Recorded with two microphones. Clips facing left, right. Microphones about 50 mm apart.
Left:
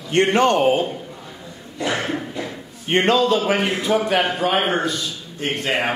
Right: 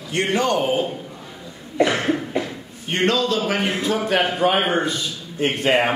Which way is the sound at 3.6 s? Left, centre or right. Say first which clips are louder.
Left 2 dB; centre.